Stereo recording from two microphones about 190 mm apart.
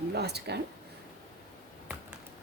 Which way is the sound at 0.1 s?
60° right (ahead or behind).